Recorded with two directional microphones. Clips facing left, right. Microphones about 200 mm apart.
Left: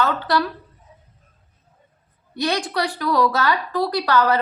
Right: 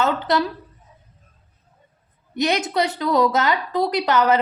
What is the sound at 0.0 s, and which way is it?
Speech, 20° right (ahead or behind).